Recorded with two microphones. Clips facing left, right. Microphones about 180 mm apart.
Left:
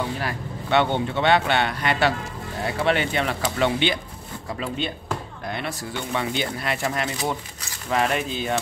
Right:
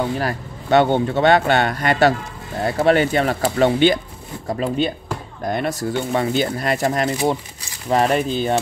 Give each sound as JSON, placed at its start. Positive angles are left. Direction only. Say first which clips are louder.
{"t": 0.2, "sound": "speech", "louder": "right 5 dB", "side_deg": -40}